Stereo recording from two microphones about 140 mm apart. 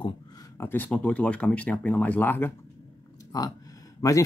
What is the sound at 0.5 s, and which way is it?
Speech, 15° left (ahead or behind).